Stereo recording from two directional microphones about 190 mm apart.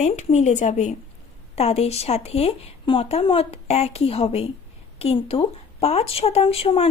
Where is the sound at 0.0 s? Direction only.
35° left (ahead or behind).